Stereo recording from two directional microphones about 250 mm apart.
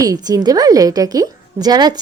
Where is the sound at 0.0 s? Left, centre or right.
Centre.